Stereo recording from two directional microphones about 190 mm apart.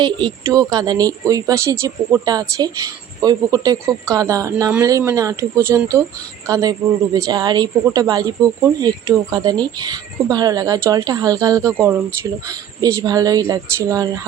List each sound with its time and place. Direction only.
0.0 s speech: 20° right (ahead or behind)